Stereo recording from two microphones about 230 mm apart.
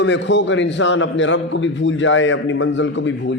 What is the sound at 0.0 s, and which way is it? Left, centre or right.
A man's voice, left.